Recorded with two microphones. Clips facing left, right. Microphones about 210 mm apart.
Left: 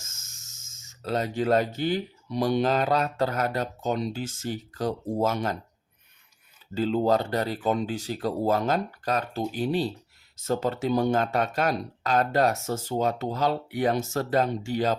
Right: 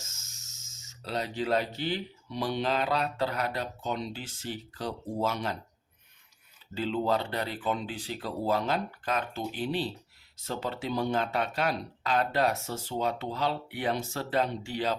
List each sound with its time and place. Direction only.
0.0 s speech: 50° left (ahead or behind)
6.7 s speech: 45° left (ahead or behind)